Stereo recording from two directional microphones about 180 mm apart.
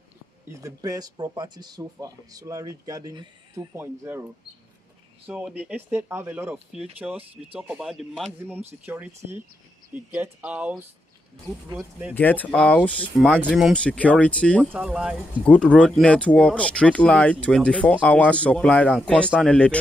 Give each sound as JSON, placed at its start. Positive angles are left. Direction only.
{"t": 0.5, "sound": "speech", "side_deg": -20}
{"t": 12.1, "sound": "speech", "side_deg": 10}
{"t": 13.4, "sound": "speech", "side_deg": -5}
{"t": 14.7, "sound": "speech", "side_deg": -5}